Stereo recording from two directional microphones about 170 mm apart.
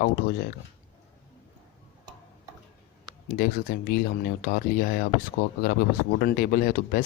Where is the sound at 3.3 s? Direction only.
60° left (ahead or behind).